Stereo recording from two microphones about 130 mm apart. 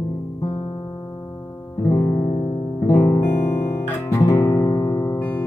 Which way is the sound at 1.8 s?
20° left (ahead or behind).